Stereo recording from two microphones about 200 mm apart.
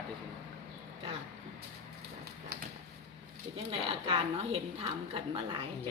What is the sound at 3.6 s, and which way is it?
A woman's voice, 30° right (ahead or behind).